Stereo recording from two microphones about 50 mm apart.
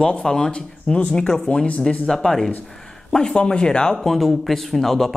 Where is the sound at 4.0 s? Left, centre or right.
Centre.